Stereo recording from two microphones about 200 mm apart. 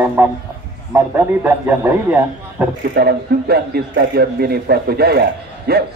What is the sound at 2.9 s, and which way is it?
A man's voice, 50° right (ahead or behind).